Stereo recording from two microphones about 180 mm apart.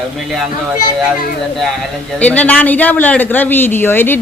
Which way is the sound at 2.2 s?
10° left (ahead or behind).